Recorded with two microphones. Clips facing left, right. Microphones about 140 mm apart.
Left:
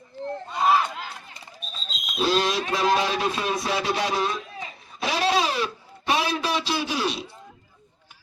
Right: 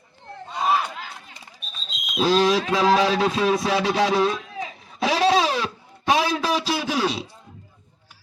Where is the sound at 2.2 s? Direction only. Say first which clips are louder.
Right 4 dB; 90° right.